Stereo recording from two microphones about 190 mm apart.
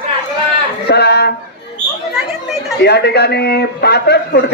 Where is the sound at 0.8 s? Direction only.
60° left (ahead or behind).